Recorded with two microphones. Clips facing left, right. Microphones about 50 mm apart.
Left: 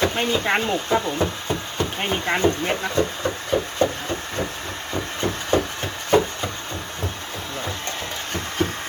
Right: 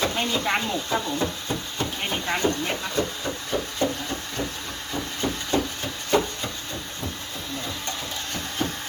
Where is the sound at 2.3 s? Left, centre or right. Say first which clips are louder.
Left 4 dB; left.